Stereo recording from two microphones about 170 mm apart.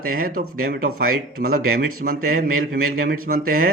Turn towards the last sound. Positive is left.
turn(degrees=-60)  # may be behind; listen again after turning